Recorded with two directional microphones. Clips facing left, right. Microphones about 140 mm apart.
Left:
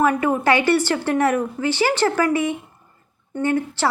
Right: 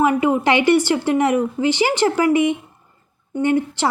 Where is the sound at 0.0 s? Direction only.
15° right (ahead or behind).